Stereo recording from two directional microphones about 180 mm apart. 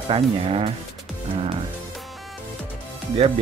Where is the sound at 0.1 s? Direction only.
30° right (ahead or behind).